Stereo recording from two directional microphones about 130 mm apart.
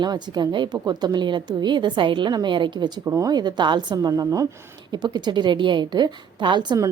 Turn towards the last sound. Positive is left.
turn(degrees=-30)  # may be behind; listen again after turning